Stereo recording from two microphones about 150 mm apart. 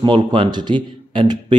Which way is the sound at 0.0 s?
35° right (ahead or behind).